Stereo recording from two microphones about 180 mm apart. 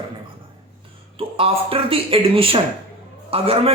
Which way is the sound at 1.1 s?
30° right (ahead or behind).